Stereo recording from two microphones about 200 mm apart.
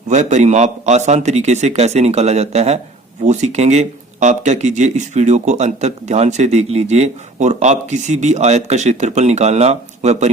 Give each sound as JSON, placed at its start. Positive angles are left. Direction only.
{"t": 0.1, "sound": "a man's voice", "side_deg": -35}